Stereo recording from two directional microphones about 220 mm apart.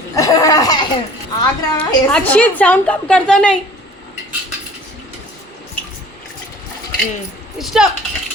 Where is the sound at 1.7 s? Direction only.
5° left (ahead or behind).